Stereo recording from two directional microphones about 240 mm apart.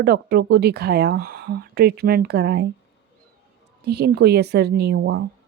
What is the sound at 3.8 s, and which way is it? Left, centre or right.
A woman's voice, right.